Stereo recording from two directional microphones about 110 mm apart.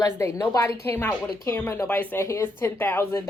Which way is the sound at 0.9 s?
20° left (ahead or behind).